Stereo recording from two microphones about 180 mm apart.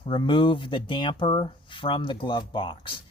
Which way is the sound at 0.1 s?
25° left (ahead or behind).